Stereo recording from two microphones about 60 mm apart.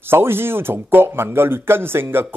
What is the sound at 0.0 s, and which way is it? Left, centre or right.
A man's voice, right.